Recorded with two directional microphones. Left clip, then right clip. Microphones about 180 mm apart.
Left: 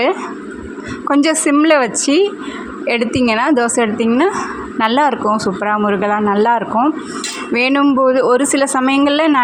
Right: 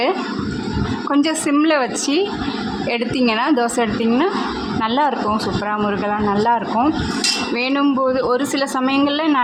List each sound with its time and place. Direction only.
1.0 s speech: 25° left (ahead or behind)